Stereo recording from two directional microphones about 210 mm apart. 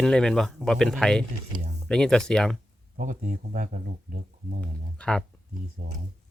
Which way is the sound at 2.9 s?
40° right (ahead or behind).